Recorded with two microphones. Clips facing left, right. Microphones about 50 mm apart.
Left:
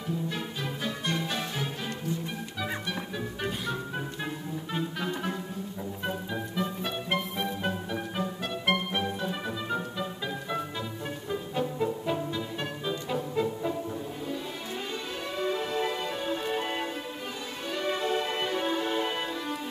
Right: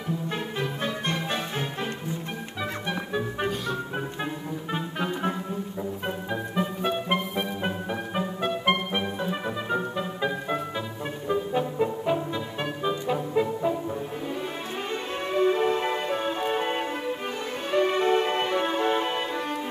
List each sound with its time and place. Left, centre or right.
0.3 s music: right
2.9 s music: right
4.7 s music: right
6.3 s music: right
15.3 s music: right